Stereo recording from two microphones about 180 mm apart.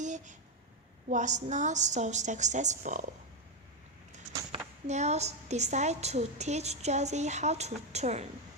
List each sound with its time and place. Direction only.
0.0 s a sound: 40° right (ahead or behind)
1.1 s a woman's voice: 40° right (ahead or behind)
4.9 s a woman's voice: 40° right (ahead or behind)